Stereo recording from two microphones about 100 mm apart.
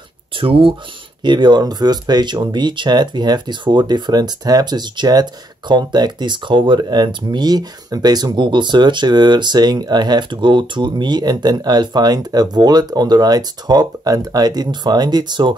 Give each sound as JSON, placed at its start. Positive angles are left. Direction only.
{"t": 0.4, "sound": "speech", "side_deg": -60}
{"t": 1.2, "sound": "speech", "side_deg": -50}